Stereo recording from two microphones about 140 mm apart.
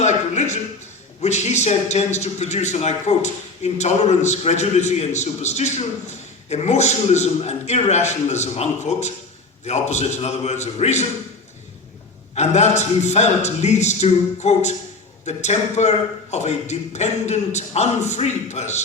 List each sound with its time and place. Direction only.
0.0 s a sound: 55° left (ahead or behind)
1.2 s a man's voice: 55° left (ahead or behind)
12.3 s a man's voice: 55° left (ahead or behind)